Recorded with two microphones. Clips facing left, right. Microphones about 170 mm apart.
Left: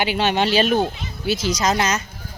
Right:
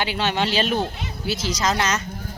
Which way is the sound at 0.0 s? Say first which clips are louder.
Left 3 dB; 15° left (ahead or behind).